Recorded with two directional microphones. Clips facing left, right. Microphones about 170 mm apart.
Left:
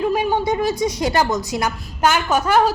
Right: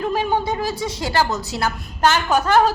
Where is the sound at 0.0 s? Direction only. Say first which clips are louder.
Left 2 dB; 15° left (ahead or behind).